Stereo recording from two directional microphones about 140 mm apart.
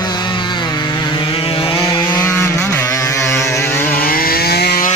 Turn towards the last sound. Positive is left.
turn(degrees=90)